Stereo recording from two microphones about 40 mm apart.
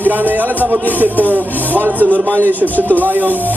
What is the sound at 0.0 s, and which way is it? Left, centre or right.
Music, right.